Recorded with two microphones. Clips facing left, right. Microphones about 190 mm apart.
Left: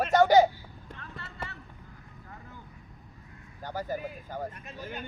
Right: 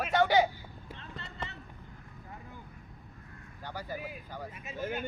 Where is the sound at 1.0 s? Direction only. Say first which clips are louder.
Left 2 dB; 20° right (ahead or behind).